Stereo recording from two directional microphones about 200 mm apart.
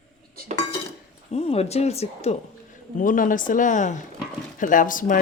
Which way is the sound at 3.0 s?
40° left (ahead or behind).